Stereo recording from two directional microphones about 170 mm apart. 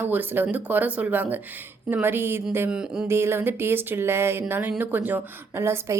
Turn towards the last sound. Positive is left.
turn(degrees=-15)  # may be behind; listen again after turning